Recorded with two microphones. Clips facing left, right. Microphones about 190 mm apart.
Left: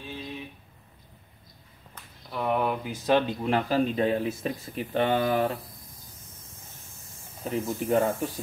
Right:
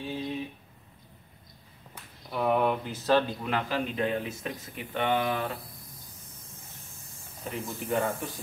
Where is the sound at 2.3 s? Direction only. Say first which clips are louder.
Right 1 dB; centre (ahead or behind).